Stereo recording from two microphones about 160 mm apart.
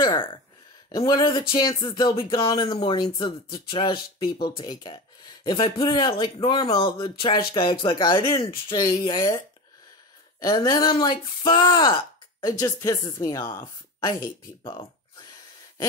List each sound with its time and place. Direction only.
0.0 s speech: 30° left (ahead or behind)
10.4 s speech: 25° left (ahead or behind)